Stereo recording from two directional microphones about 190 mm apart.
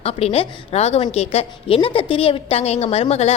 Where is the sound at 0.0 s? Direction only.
30° left (ahead or behind).